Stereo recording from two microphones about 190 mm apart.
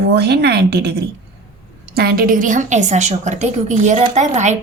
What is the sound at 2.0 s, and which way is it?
A woman's voice, 50° right (ahead or behind).